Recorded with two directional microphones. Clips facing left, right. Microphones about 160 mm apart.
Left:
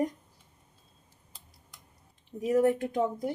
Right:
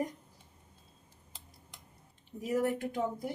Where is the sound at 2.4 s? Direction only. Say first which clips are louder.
Left 7 dB; 30° left (ahead or behind).